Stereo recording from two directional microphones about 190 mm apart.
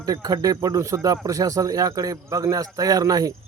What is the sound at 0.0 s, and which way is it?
Speech, 20° right (ahead or behind).